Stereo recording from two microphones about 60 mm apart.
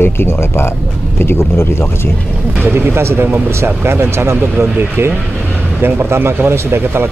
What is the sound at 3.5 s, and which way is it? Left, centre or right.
Speech, right.